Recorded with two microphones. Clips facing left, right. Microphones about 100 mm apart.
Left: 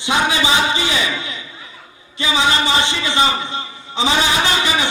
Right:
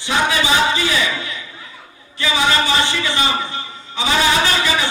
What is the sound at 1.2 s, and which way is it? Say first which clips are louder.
Chatter: even; 20° left (ahead or behind).